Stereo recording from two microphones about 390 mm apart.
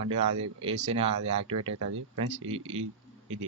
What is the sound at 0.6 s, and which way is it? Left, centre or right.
Speech, centre.